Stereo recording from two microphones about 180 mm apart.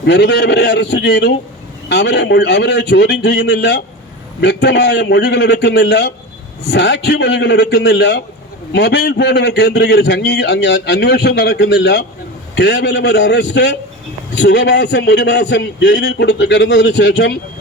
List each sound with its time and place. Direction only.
0.0 s a man's voice: 70° left (ahead or behind)